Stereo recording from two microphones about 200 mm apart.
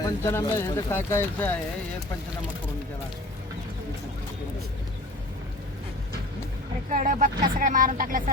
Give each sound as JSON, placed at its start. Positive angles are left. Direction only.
{"t": 0.0, "sound": "speech", "side_deg": 15}
{"t": 6.9, "sound": "speech", "side_deg": -40}